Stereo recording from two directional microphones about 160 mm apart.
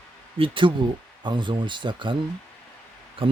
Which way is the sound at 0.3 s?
35° right (ahead or behind).